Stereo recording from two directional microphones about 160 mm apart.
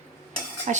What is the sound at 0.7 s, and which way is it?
Speech, 50° right (ahead or behind).